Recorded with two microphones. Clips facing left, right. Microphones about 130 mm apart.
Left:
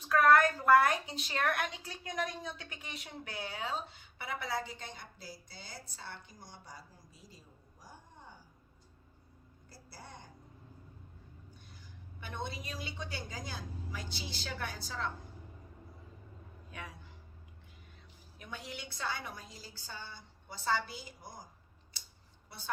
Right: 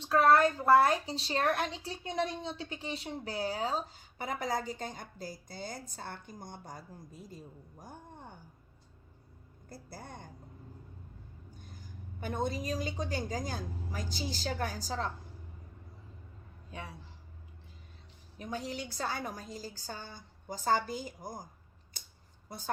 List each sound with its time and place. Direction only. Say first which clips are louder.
0.0 s a sound: right 1 dB; 30° right (ahead or behind)
0.6 s a woman's voice: right 2 dB; 30° right (ahead or behind); by 8.4 s 55° right (ahead or behind)
9.6 s a woman's voice: right 6 dB; 50° right (ahead or behind)
11.5 s a woman's voice: right 5 dB; 45° right (ahead or behind)
16.7 s a woman's voice: right 3 dB; 30° right (ahead or behind)
18.3 s a woman's voice: right 7 dB; 40° right (ahead or behind)
22.0 s scissors: right 4 dB; 50° right (ahead or behind)
22.4 s speech: right 6 dB; 45° right (ahead or behind)